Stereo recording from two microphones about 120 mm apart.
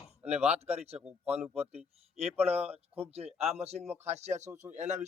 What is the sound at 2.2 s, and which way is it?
Speech, 55° right (ahead or behind).